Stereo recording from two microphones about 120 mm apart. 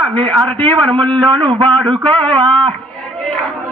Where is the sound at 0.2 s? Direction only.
45° right (ahead or behind).